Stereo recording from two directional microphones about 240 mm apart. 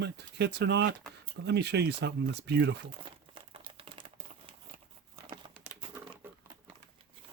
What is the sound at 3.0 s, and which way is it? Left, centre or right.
Crumpling, right.